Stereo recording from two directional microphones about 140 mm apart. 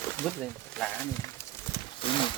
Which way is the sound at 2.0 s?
35° left (ahead or behind).